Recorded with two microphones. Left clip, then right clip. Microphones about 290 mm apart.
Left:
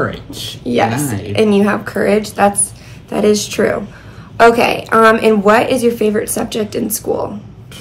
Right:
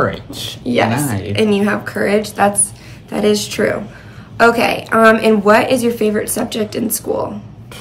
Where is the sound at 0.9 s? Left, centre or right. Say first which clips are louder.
Even; centre.